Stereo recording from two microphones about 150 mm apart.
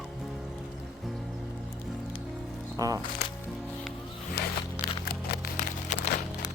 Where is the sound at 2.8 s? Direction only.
25° right (ahead or behind).